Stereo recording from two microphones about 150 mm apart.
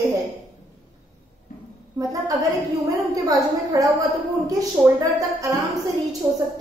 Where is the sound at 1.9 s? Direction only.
20° right (ahead or behind).